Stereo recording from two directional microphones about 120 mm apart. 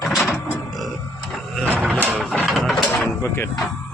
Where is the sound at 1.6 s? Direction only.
10° left (ahead or behind).